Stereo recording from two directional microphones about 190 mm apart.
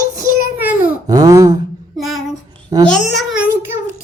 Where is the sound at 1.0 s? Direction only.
20° right (ahead or behind).